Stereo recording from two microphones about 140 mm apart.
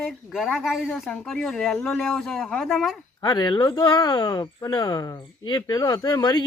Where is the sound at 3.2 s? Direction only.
30° left (ahead or behind).